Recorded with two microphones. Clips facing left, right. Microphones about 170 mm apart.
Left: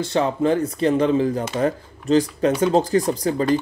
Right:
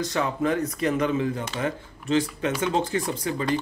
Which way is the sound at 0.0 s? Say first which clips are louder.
Left 5 dB; 30° left (ahead or behind).